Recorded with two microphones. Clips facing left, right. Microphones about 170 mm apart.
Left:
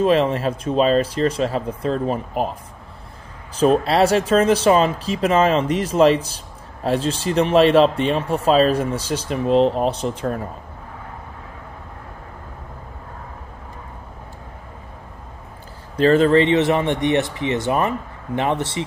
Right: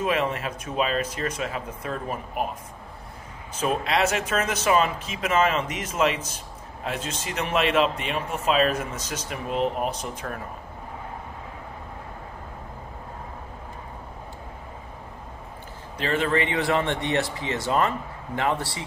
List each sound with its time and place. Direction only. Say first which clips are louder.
0.0 s speech: left 8 dB; 30° left (ahead or behind)
3.5 s speech: left 9 dB; 35° left (ahead or behind)
16.0 s speech: left 10 dB; 35° left (ahead or behind); by 18.9 s 20° left (ahead or behind)